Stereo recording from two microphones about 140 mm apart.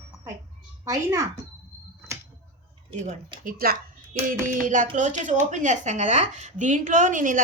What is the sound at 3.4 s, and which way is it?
Speech, 90° right.